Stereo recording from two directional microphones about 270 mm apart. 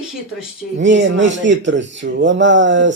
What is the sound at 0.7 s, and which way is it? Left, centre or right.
A man's voice, right.